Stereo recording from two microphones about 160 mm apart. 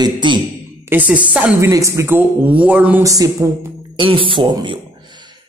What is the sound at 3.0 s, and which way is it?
Speech, 20° right (ahead or behind).